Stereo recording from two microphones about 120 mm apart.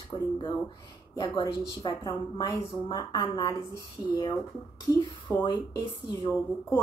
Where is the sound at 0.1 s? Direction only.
35° left (ahead or behind).